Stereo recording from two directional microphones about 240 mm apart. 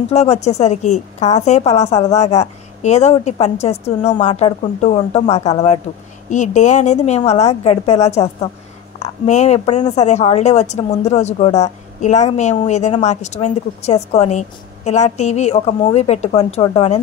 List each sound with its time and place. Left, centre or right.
0.1 s a woman's voice: left